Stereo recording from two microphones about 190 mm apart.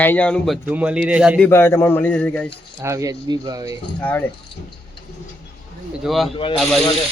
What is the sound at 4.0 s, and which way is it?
Speech, 10° left (ahead or behind).